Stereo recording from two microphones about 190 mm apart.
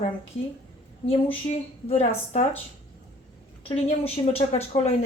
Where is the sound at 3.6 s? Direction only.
30° left (ahead or behind).